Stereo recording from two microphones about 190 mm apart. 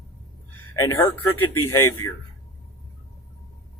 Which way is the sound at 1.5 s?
15° left (ahead or behind).